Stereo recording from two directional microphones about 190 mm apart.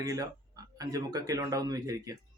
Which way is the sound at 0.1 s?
20° right (ahead or behind).